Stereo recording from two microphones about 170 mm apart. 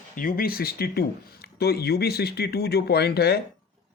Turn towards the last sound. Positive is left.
turn(degrees=70)  # may be behind; listen again after turning